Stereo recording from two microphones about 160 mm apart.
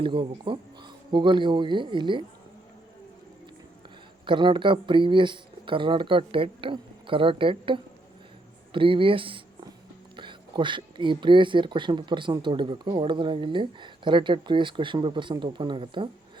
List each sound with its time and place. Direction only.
0.0 s speech: 30° right (ahead or behind)
4.3 s speech: 30° right (ahead or behind)